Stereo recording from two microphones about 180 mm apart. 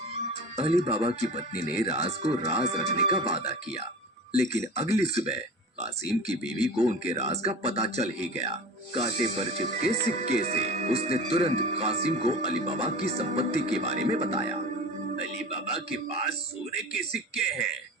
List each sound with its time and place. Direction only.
0.5 s speech: 35° right (ahead or behind)
6.7 s speech: 35° right (ahead or behind)
15.6 s a man's voice: 35° right (ahead or behind)